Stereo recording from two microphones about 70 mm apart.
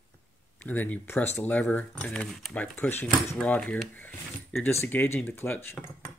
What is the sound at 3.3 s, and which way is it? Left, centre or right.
Speech, centre.